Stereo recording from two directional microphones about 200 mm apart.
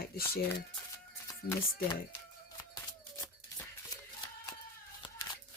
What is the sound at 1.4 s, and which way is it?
Speech, 50° left (ahead or behind).